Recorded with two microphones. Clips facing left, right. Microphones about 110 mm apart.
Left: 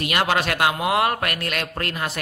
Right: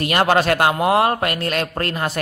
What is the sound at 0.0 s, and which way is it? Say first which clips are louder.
Speech: right 5 dB; 40° right (ahead or behind).